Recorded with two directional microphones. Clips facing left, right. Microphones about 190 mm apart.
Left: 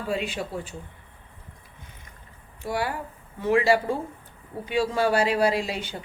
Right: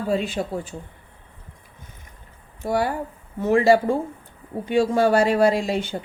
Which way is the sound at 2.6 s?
45° right (ahead or behind).